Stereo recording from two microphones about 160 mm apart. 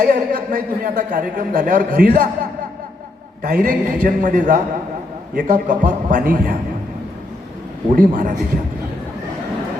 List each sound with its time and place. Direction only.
0.0 s a man's voice: 60° right (ahead or behind)
3.4 s a man's voice: 60° right (ahead or behind)
7.9 s a man's voice: 55° right (ahead or behind)